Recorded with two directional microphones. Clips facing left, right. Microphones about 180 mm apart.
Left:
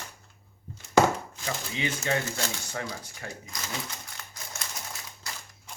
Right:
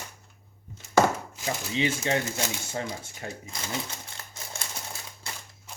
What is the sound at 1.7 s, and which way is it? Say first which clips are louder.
Speech: right 3 dB; 25° right (ahead or behind).